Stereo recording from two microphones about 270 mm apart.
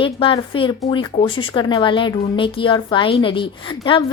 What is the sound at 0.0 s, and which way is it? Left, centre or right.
Speech, centre.